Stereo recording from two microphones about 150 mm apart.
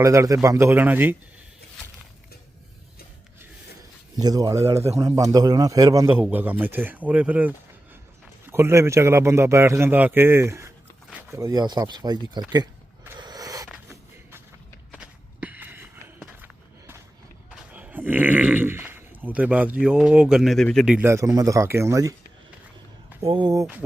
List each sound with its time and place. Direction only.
0.0 s a man's voice: 20° right (ahead or behind)
4.2 s speech: 25° right (ahead or behind)
6.1 s a man's voice: 10° right (ahead or behind); by 12.4 s 30° right (ahead or behind)
13.1 s a sound: 25° right (ahead or behind)
14.9 s walk: 10° right (ahead or behind)
17.5 s speech: 10° right (ahead or behind)
20.9 s speech: 15° right (ahead or behind)
23.2 s speech: 30° right (ahead or behind)